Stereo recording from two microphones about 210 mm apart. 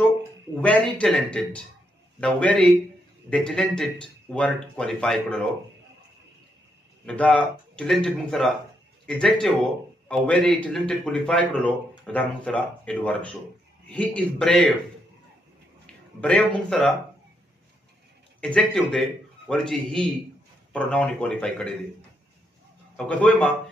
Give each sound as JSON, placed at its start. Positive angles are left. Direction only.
{"t": 0.6, "sound": "speech", "side_deg": 5}
{"t": 7.1, "sound": "speech", "side_deg": 5}
{"t": 16.2, "sound": "speech", "side_deg": 5}
{"t": 18.4, "sound": "speech", "side_deg": 5}
{"t": 22.9, "sound": "speech", "side_deg": 5}